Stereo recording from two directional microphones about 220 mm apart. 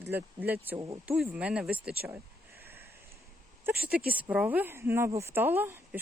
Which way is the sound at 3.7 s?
45° right (ahead or behind).